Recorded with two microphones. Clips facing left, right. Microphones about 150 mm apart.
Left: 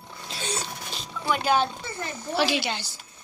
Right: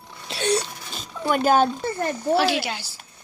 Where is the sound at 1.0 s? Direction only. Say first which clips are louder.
Right 5 dB; 45° right (ahead or behind).